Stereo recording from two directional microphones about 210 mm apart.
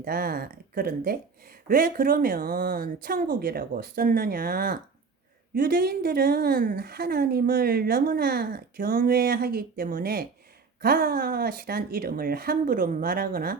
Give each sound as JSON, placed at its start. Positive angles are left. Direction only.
{"t": 0.0, "sound": "a woman's voice", "side_deg": -45}